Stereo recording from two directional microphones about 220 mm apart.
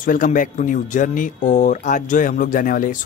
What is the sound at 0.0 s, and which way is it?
Speech, 35° left (ahead or behind).